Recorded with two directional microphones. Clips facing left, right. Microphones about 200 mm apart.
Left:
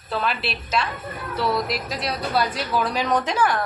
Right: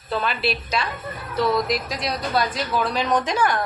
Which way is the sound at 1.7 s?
5° left (ahead or behind).